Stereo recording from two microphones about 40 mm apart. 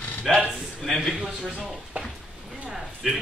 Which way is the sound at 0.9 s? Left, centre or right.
Centre.